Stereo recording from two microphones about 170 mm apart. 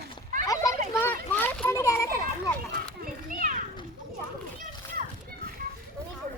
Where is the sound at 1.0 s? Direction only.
10° left (ahead or behind).